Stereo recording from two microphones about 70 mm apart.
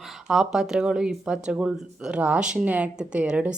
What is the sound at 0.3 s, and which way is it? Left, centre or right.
Speech, centre.